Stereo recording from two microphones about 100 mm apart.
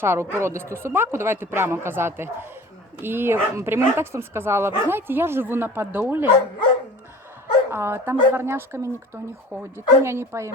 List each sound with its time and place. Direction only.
0.0 s speech: 25° right (ahead or behind)
7.7 s speech: 25° right (ahead or behind)